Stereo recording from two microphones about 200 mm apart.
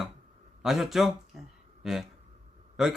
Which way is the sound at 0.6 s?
Centre (ahead or behind).